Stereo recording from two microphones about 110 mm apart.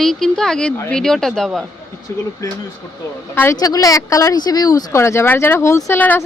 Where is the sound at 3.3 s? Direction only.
20° left (ahead or behind).